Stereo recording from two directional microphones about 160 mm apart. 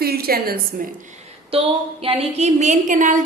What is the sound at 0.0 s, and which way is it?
Speech, 70° right (ahead or behind).